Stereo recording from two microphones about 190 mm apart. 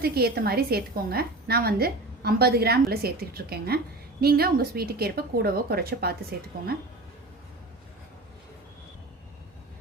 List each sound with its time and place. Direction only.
0.0 s a woman's voice: 55° right (ahead or behind)